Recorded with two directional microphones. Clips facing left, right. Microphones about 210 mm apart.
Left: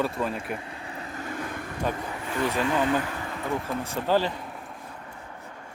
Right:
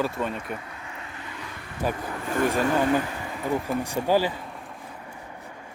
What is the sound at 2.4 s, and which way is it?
Speech, 45° right (ahead or behind).